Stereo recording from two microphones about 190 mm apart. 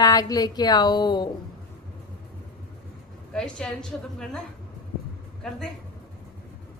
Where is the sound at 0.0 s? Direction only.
20° left (ahead or behind).